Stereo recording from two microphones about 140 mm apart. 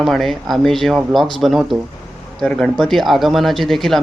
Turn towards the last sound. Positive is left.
turn(degrees=0)  # may be behind; listen again after turning